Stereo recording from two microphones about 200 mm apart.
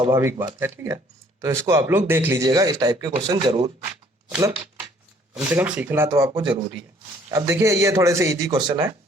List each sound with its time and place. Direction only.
0.1 s speech: 15° right (ahead or behind)
5.3 s speech: 5° right (ahead or behind)